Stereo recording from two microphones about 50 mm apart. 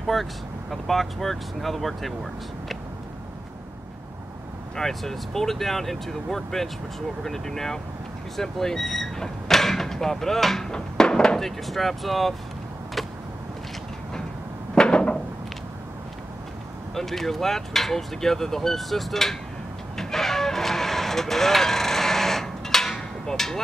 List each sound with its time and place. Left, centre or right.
0.0 s speech: centre
4.7 s speech: centre
8.4 s door: centre
11.3 s speech: centre
14.8 s a sound: centre
16.9 s speech: centre
20.0 s vehicle: centre